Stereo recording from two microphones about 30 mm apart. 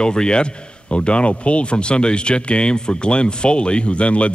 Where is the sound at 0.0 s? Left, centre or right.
Left.